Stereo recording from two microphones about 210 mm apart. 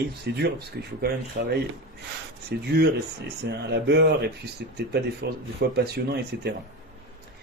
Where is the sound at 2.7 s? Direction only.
50° right (ahead or behind).